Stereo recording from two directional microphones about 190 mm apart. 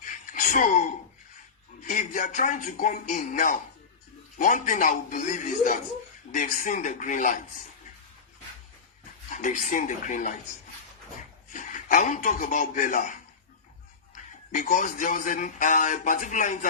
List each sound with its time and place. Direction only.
0.0 s a sound: 40° left (ahead or behind)
1.8 s speech: 40° left (ahead or behind)
9.3 s speech: 40° left (ahead or behind)
11.5 s a man's voice: 40° left (ahead or behind)
14.5 s speech: 40° left (ahead or behind)